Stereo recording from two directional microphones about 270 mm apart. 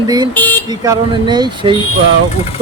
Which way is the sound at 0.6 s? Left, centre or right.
Centre.